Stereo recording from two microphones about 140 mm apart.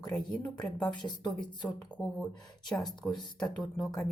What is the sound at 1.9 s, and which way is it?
Speech, 5° left (ahead or behind).